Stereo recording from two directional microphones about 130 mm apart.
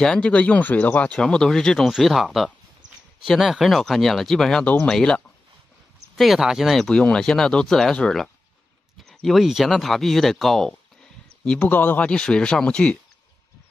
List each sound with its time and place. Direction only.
0.0 s speech: 5° left (ahead or behind)